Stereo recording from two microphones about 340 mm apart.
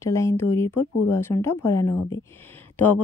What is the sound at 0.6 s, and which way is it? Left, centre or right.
Speech, left.